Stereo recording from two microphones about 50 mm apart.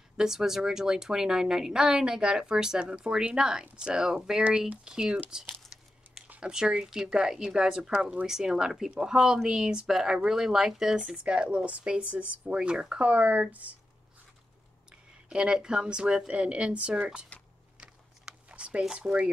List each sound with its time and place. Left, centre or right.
0.2 s a woman's voice: centre
6.0 s a sound: right
6.4 s a woman's voice: centre
11.0 s speech: right
12.5 s a woman's voice: centre
13.1 s speech: right
14.9 s a woman's voice: centre
17.7 s a sound: right
18.9 s speech: right